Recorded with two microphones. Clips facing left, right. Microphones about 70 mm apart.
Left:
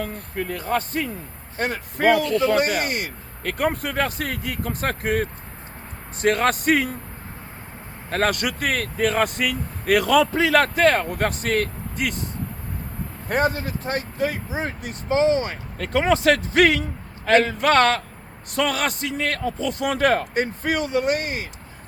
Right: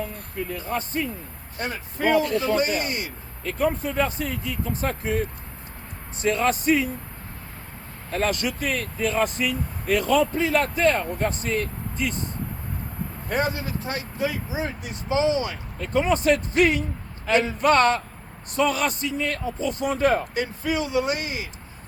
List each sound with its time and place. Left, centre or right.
0.0 s speech: left
8.1 s speech: left
13.2 s speech: left
15.8 s speech: left
17.2 s a man's voice: left
20.4 s speech: left